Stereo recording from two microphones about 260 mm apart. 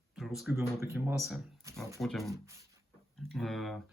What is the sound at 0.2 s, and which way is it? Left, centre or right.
Speech, centre.